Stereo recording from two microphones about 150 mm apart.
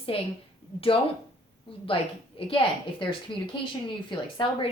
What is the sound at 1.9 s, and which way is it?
Speech, 35° left (ahead or behind).